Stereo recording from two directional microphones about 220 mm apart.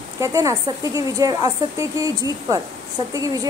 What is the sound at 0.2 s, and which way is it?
A woman's voice, 15° right (ahead or behind).